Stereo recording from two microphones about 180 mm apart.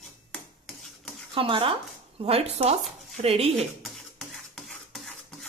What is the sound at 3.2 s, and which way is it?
Cutlery, 35° right (ahead or behind).